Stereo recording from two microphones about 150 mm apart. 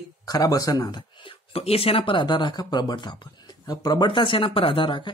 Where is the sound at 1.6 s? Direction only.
40° left (ahead or behind).